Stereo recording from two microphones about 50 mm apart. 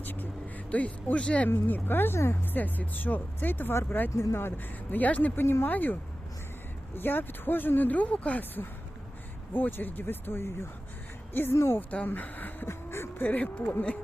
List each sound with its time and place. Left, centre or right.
0.0 s vehicle: left
0.7 s speech: left
1.5 s speech: left
2.1 s speech: left
2.6 s speech: left
4.1 s speech: left
5.4 s speech: left
5.6 s speech: left
9.5 s speech: left
11.5 s speech: left
11.8 s speech: left
12.6 s a sound: left
13.2 s speech: left